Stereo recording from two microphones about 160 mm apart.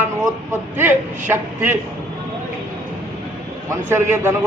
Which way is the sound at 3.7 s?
15° right (ahead or behind).